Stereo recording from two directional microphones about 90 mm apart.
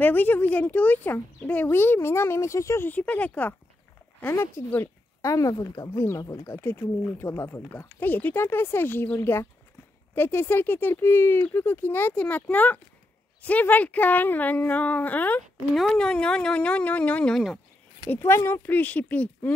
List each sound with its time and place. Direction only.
0.0 s speech: 20° left (ahead or behind)
2.9 s speech: 15° left (ahead or behind)
15.7 s speech: 5° left (ahead or behind)
18.1 s speech: 30° left (ahead or behind)